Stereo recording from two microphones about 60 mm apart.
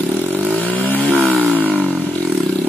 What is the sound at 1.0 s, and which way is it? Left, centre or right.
Vehicle, centre.